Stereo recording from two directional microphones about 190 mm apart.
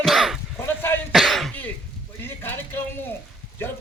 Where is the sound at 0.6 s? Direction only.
10° left (ahead or behind).